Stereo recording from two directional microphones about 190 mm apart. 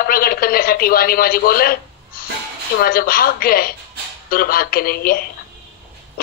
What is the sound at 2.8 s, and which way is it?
Speech, 50° left (ahead or behind).